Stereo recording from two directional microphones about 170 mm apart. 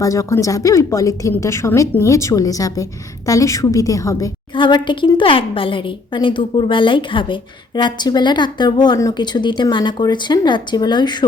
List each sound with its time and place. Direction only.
0.0 s speech: 20° left (ahead or behind)